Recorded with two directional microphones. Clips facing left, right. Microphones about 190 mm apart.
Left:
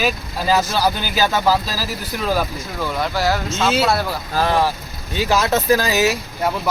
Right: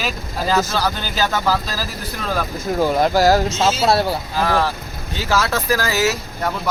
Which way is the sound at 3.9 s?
30° right (ahead or behind).